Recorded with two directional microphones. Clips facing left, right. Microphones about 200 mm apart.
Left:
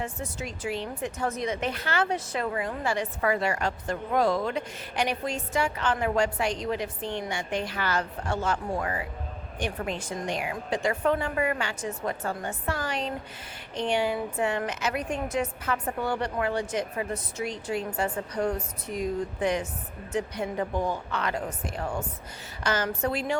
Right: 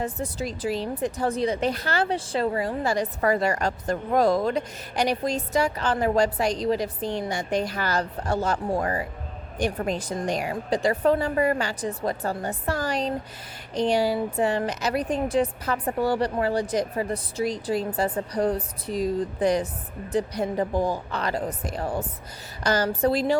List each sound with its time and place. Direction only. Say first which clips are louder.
0.0 s speech: right 5 dB; 35° right (ahead or behind)